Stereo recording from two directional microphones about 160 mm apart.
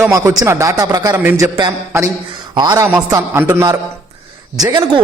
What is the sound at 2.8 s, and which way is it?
A man's voice, 15° right (ahead or behind).